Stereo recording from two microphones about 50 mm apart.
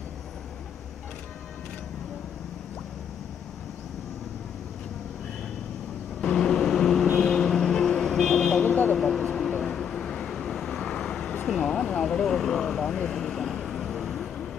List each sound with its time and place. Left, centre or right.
6.2 s vehicle: centre
8.6 s vehicle: left
8.9 s vehicle: centre
11.7 s vehicle: centre